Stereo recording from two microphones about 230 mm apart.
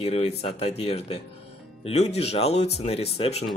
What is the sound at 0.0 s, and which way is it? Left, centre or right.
Speech, left.